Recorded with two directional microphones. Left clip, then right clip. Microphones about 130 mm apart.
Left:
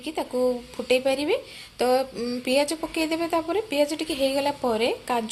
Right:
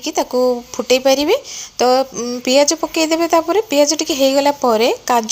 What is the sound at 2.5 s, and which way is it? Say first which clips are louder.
Speech: right 11 dB; 45° right (ahead or behind).